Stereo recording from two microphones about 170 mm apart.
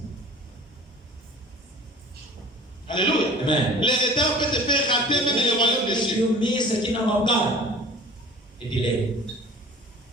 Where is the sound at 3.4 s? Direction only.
30° left (ahead or behind).